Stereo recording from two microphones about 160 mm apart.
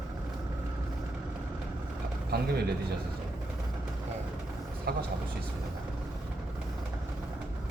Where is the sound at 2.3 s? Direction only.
80° right.